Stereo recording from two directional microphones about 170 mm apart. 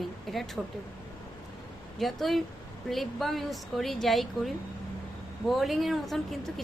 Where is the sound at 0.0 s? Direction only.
Centre (ahead or behind).